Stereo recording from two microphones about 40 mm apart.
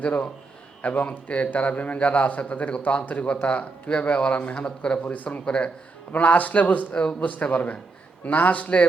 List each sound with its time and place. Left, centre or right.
0.0 s a man's voice: left
5.0 s a man's voice: left
5.5 s a man's voice: left
6.1 s a man's voice: left
6.9 s a man's voice: left
7.3 s a man's voice: left